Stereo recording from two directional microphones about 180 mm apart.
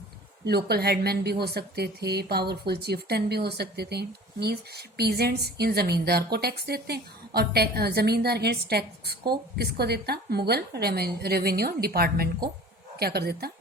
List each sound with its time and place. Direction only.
0.4 s a woman's voice: 60° right (ahead or behind)